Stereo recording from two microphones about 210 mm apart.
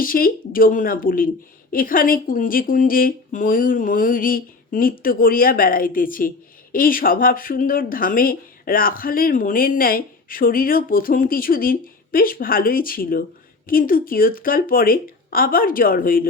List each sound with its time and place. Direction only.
0.0 s speech: 40° left (ahead or behind)